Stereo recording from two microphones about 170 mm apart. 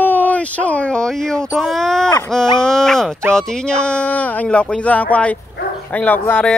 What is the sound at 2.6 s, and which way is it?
Speech, 5° left (ahead or behind).